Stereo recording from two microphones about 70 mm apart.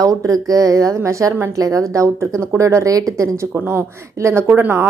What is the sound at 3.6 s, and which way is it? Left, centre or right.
Speech, right.